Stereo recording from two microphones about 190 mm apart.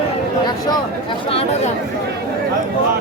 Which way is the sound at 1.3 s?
30° left (ahead or behind).